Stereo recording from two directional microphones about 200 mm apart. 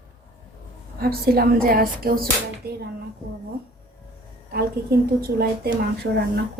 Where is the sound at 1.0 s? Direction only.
50° right (ahead or behind).